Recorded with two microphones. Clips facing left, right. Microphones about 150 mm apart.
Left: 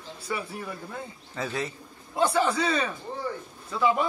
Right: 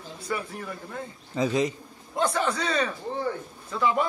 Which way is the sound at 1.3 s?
15° right (ahead or behind).